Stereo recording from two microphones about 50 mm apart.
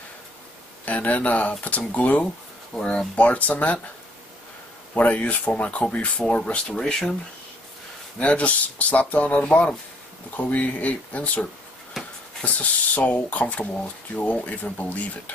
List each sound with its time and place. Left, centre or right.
0.8 s speech: left
4.9 s speech: left; by 7.2 s centre
8.2 s speech: left